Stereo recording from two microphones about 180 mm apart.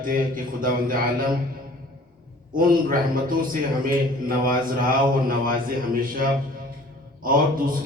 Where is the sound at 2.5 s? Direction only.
50° right (ahead or behind).